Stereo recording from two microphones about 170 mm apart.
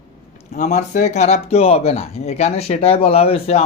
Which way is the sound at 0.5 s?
45° left (ahead or behind).